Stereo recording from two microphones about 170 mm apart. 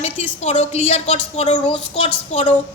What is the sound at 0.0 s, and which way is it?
A woman's voice, 40° left (ahead or behind).